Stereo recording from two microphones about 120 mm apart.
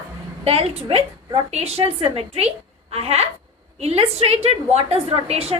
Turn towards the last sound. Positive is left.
turn(degrees=-60)  # may be behind; listen again after turning